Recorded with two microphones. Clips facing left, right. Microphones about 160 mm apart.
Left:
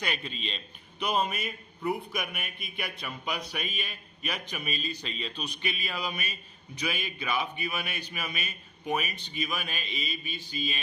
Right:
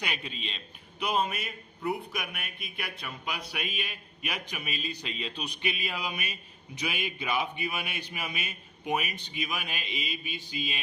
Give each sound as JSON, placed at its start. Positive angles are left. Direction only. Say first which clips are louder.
{"t": 0.0, "sound": "a man's voice", "louder": "left 2 dB", "side_deg": -10}